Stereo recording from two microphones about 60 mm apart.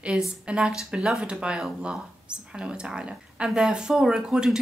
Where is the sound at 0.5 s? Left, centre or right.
Centre.